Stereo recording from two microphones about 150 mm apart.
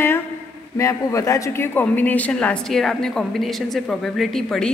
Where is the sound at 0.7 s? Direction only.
20° left (ahead or behind).